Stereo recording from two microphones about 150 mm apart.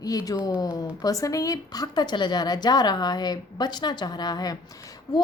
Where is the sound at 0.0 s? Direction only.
25° left (ahead or behind).